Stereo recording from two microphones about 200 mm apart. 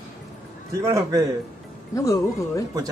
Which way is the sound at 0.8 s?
15° right (ahead or behind).